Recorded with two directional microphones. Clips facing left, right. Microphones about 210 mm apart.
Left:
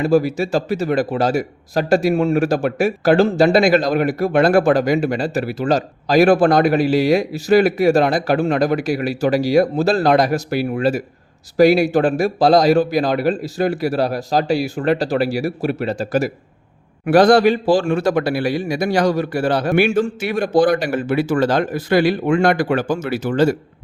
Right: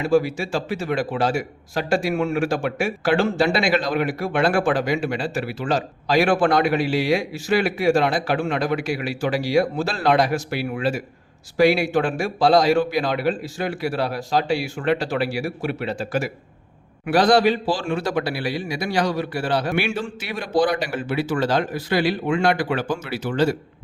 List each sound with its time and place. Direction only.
0.0 s a man's voice: 40° left (ahead or behind)